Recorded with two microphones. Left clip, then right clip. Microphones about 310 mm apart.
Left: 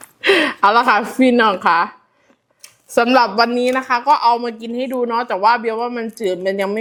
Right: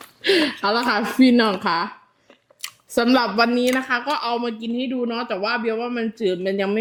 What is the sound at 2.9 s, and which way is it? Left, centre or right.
A woman's voice, left.